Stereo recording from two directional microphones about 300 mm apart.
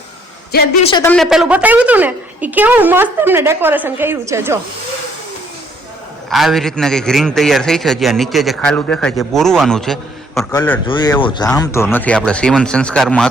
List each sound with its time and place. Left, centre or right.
0.5 s a woman's voice: left
0.9 s speech: centre
1.1 s a man's voice: centre
6.3 s a man's voice: centre